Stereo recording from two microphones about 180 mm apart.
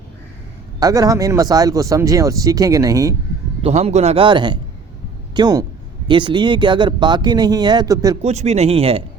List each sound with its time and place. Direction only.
0.8 s speech: 20° right (ahead or behind)
3.6 s a man's voice: 35° right (ahead or behind); by 8.2 s 20° right (ahead or behind)
8.2 s a man's voice: 40° right (ahead or behind)